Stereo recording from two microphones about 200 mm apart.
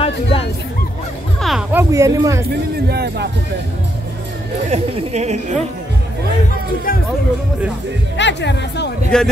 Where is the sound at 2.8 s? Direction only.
55° right (ahead or behind).